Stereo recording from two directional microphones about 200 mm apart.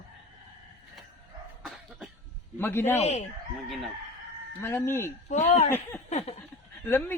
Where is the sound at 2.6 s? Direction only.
10° left (ahead or behind).